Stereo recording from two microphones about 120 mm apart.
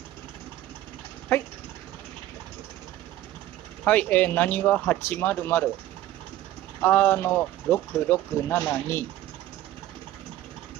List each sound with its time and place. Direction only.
1.3 s speech: 20° left (ahead or behind)
3.8 s speech: 15° left (ahead or behind)
6.8 s speech: 15° left (ahead or behind)